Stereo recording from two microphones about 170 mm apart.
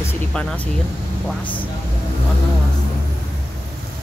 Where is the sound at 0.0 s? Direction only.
5° left (ahead or behind).